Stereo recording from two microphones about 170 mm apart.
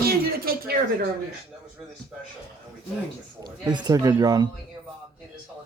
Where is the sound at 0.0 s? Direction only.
60° right (ahead or behind).